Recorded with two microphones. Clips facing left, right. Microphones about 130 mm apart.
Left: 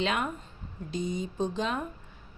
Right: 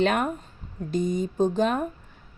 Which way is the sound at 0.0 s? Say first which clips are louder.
Right 6 dB; 50° right (ahead or behind).